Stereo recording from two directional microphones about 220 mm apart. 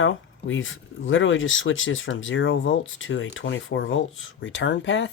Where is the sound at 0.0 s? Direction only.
60° left (ahead or behind).